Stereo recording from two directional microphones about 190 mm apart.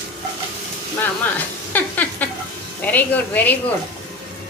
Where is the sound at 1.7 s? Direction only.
10° left (ahead or behind).